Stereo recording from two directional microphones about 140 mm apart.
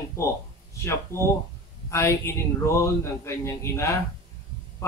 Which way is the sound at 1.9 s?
20° left (ahead or behind).